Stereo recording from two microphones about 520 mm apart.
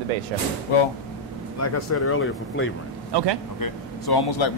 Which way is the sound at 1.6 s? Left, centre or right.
Left.